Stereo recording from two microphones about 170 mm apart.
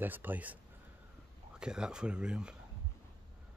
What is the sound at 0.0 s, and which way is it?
Speech, 10° right (ahead or behind).